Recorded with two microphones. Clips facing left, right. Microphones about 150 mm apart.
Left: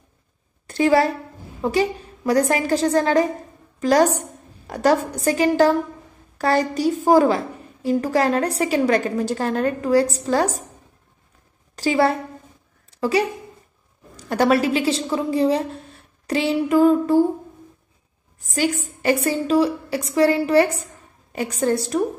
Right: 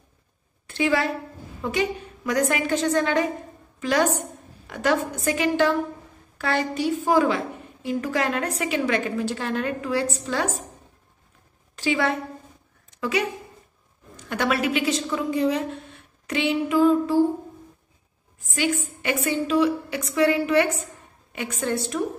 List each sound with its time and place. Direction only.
0.7 s a woman's voice: 40° left (ahead or behind)
11.7 s a woman's voice: 40° left (ahead or behind)
18.4 s a woman's voice: 40° left (ahead or behind)